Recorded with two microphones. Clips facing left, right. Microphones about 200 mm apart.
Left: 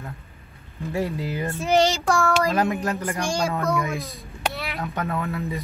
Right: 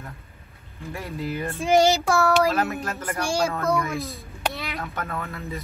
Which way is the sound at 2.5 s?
15° left (ahead or behind).